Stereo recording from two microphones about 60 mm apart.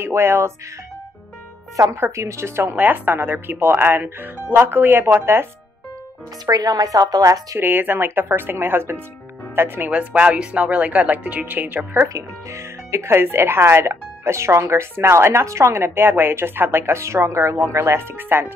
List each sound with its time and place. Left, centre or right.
0.0 s speech: right
1.8 s speech: right
2.1 s speech: right
2.7 s speech: right
6.5 s a woman's voice: right
7.5 s speech: right
9.8 s speech: right
12.1 s speech: right